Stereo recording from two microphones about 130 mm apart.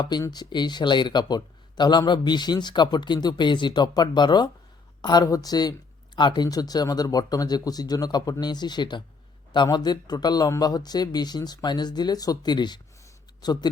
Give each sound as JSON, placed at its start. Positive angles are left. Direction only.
{"t": 0.0, "sound": "speech", "side_deg": 30}